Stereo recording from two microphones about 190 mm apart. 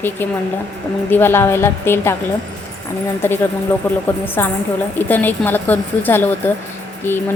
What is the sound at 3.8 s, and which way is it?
A woman's voice, 10° left (ahead or behind).